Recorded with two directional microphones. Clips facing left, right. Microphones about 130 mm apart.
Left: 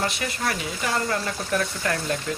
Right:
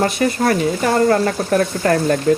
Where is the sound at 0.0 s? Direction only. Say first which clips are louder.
Right 11 dB; 45° right (ahead or behind).